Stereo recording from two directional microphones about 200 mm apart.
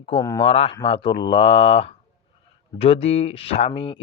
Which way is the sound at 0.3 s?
30° left (ahead or behind).